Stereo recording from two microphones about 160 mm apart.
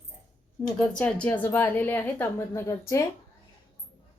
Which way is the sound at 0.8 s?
10° left (ahead or behind).